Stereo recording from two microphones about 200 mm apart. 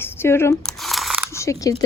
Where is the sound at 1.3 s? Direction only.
15° left (ahead or behind).